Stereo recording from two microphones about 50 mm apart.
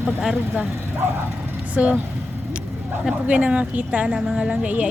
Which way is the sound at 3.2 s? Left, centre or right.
Right.